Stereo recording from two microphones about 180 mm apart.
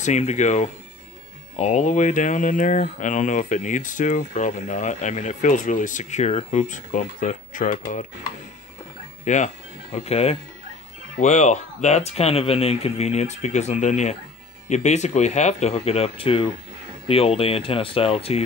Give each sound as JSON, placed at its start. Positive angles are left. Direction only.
{"t": 0.0, "sound": "speech", "side_deg": 40}
{"t": 9.2, "sound": "speech", "side_deg": 45}